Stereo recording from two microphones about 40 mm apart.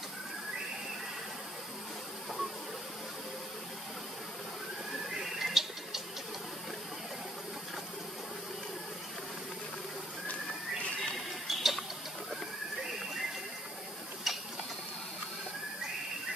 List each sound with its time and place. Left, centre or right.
5.1 s tick: centre
11.4 s tick-tock: centre
14.3 s tick-tock: centre